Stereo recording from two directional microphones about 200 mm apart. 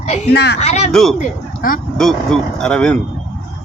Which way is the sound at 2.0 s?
5° left (ahead or behind).